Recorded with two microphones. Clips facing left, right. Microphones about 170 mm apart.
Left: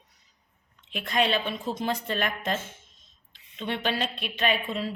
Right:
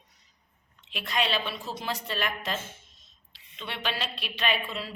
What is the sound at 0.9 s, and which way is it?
Speech, 50° left (ahead or behind).